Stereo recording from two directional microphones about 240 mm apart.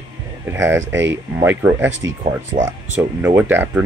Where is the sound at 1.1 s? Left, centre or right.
Centre.